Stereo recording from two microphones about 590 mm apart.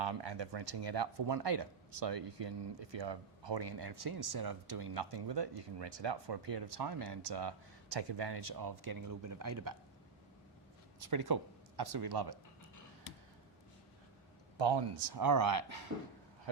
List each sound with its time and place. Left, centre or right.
0.0 s speech: right
11.0 s speech: right
14.6 s speech: right